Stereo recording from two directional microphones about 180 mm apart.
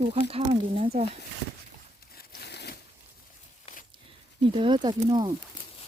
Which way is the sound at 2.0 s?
55° left (ahead or behind).